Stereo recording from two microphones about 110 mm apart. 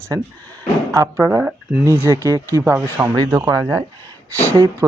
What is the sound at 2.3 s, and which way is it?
Speech, 30° right (ahead or behind).